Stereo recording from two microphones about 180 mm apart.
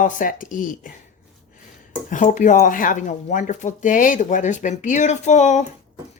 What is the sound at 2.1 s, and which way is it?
Speech, 45° left (ahead or behind).